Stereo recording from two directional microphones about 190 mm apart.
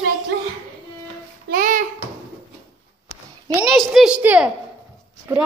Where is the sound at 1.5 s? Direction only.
45° right (ahead or behind).